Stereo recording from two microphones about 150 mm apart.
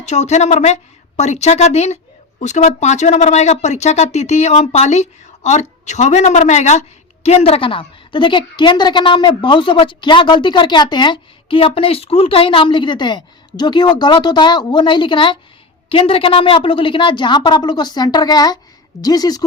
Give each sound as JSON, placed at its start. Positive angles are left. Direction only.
{"t": 0.0, "sound": "a woman's voice", "side_deg": 50}